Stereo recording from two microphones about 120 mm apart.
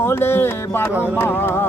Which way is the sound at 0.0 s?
20° left (ahead or behind).